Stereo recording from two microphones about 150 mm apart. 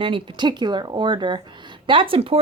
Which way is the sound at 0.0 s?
35° right (ahead or behind).